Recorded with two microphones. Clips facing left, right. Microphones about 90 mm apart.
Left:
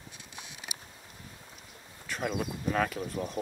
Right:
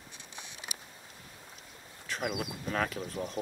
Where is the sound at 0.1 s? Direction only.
5° left (ahead or behind).